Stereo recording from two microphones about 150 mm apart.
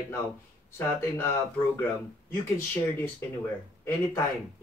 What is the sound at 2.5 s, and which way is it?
Speech, 15° left (ahead or behind).